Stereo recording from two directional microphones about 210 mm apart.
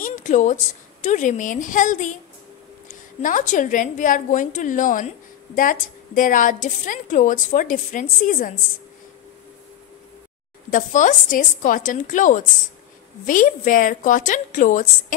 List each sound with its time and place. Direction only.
0.0 s a sound: 40° left (ahead or behind)
1.0 s a woman's voice: 35° left (ahead or behind)
10.7 s a woman's voice: 35° left (ahead or behind)